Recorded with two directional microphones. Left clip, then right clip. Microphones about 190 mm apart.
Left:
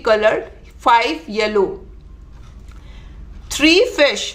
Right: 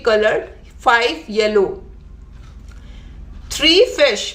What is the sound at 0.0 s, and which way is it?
Speech, 15° left (ahead or behind).